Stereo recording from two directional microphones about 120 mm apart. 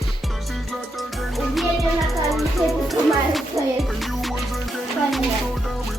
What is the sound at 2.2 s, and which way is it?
Music, centre (ahead or behind).